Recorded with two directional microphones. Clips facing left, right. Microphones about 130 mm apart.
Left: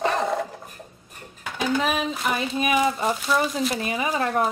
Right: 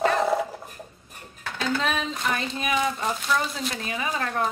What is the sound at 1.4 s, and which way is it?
A woman's voice, 10° left (ahead or behind).